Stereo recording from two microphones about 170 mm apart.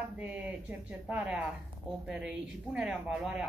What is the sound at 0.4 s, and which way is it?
Speech, 5° right (ahead or behind).